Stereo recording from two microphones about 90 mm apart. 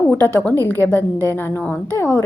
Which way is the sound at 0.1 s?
20° left (ahead or behind).